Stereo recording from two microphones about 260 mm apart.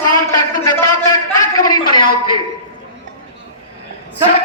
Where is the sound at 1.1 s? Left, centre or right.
Centre.